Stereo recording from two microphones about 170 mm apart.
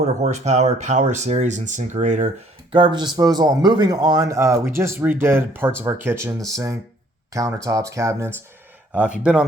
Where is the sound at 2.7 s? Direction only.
25° right (ahead or behind).